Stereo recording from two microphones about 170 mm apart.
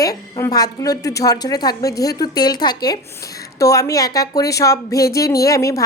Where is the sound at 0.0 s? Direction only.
20° left (ahead or behind).